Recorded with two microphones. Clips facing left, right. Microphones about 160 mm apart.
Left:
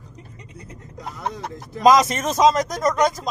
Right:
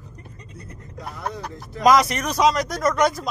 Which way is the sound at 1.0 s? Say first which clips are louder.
Left 1 dB; 20° left (ahead or behind).